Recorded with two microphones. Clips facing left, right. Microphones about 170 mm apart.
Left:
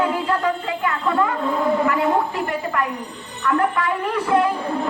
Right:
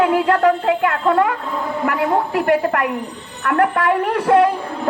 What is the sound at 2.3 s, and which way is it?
A man's voice, 70° right (ahead or behind).